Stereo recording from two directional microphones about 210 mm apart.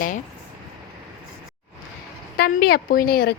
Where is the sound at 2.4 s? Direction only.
50° left (ahead or behind).